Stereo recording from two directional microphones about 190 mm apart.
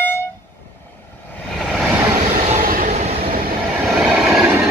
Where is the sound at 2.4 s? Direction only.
45° right (ahead or behind).